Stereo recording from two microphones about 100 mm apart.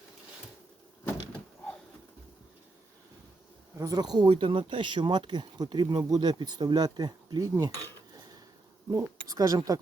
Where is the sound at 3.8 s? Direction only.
40° right (ahead or behind).